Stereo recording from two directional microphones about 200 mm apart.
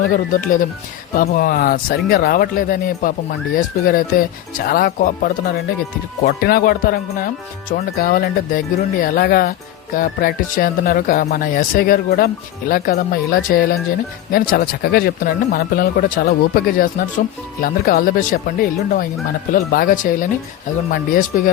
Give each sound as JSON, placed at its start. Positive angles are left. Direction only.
{"t": 0.1, "sound": "speech", "side_deg": 40}